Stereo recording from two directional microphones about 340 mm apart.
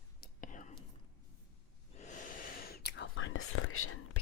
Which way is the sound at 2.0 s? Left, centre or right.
Left.